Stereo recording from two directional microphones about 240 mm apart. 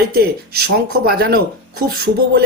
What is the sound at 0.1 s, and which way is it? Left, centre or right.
Speech, right.